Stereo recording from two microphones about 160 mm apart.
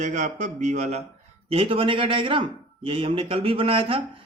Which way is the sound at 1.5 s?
35° right (ahead or behind).